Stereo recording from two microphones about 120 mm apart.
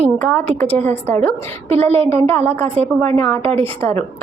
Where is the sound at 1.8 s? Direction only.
55° right (ahead or behind).